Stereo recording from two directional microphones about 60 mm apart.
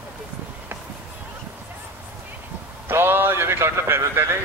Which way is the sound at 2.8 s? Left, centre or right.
Right.